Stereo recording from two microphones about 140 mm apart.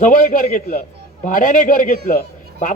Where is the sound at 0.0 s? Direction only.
70° left (ahead or behind).